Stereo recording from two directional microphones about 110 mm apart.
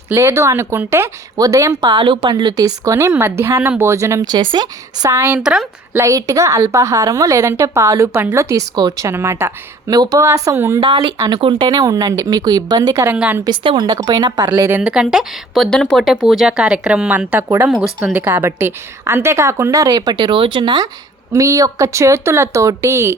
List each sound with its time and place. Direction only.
0.1 s a woman's voice: 20° right (ahead or behind)
1.8 s speech: 45° right (ahead or behind)
2.3 s a woman's voice: 35° right (ahead or behind)
5.4 s a woman's voice: 5° right (ahead or behind)
5.9 s a woman's voice: 30° right (ahead or behind)
8.7 s a woman's voice: 35° right (ahead or behind)
10.8 s speech: 50° right (ahead or behind)
11.7 s speech: 35° right (ahead or behind)
13.1 s a woman's voice: 15° right (ahead or behind)
13.4 s speech: 45° right (ahead or behind)
13.8 s speech: 35° right (ahead or behind)
14.8 s a woman's voice: 5° right (ahead or behind); by 23.1 s 25° right (ahead or behind)